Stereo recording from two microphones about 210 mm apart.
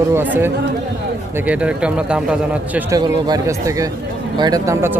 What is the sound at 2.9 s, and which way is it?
A man's voice, 20° right (ahead or behind).